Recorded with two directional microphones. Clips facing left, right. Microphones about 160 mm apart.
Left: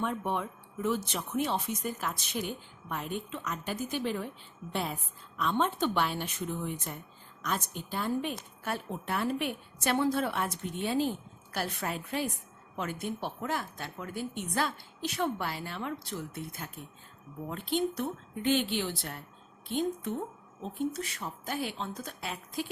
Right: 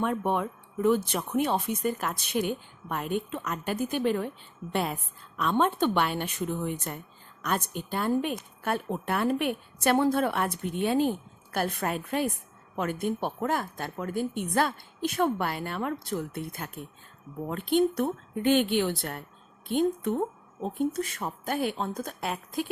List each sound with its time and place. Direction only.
0.0 s speech: 60° right (ahead or behind)